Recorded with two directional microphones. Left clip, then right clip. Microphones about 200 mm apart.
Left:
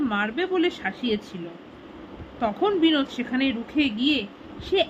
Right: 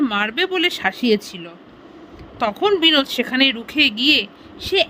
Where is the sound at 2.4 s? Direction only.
55° right (ahead or behind).